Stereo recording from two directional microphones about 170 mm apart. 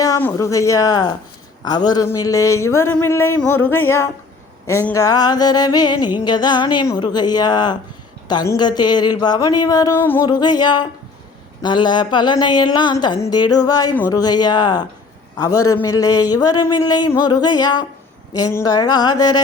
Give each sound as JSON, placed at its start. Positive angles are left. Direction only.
{"t": 0.0, "sound": "a sound", "side_deg": 20}
{"t": 0.3, "sound": "speech", "side_deg": 20}
{"t": 10.2, "sound": "speech", "side_deg": 25}